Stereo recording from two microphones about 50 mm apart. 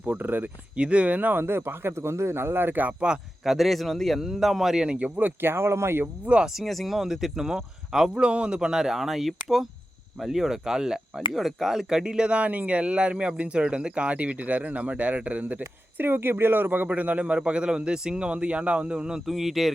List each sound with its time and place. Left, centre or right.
0.0 s speech: right
0.8 s speech: right
1.4 s speech: right
3.4 s a man's voice: centre; by 5.3 s right
5.4 s speech: right
6.4 s speech: centre; by 15.6 s right
16.0 s speech: right; by 19.2 s centre
19.2 s a man's voice: centre